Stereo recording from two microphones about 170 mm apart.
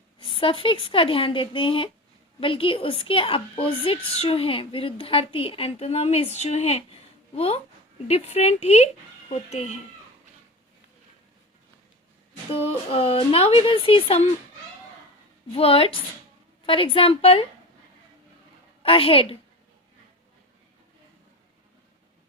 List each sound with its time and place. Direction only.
0.2 s a woman's voice: 30° left (ahead or behind)
12.5 s a woman's voice: 35° left (ahead or behind)
15.5 s a woman's voice: 35° left (ahead or behind)
18.8 s a woman's voice: 35° left (ahead or behind)